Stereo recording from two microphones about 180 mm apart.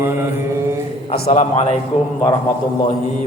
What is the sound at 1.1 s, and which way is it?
Speech, 35° left (ahead or behind).